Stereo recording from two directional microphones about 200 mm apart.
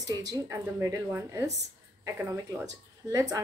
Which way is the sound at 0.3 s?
15° right (ahead or behind).